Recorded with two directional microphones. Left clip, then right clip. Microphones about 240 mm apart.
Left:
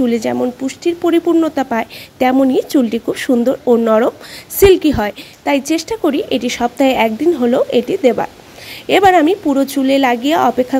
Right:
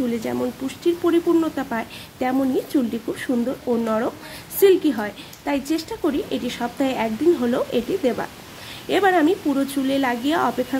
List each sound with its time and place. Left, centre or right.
0.1 s speech: left